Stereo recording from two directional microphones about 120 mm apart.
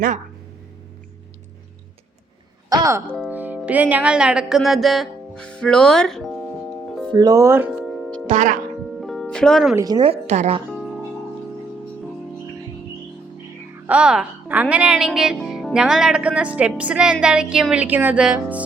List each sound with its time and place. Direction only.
2.6 s music: 25° right (ahead or behind)
3.2 s music: 15° right (ahead or behind)
3.7 s a woman's voice: 10° right (ahead or behind)
7.1 s speech: 35° right (ahead or behind)
7.8 s music: centre (ahead or behind)
8.3 s speech: 90° right
9.0 s music: centre (ahead or behind)
9.2 s speech: 5° left (ahead or behind)
10.2 s speech: 70° right (ahead or behind)
10.7 s music: centre (ahead or behind)
13.8 s speech: 10° right (ahead or behind)